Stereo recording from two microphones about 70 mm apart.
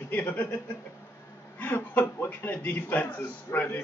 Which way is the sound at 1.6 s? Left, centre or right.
Left.